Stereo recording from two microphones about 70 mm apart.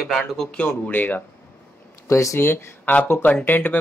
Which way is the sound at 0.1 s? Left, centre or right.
Centre.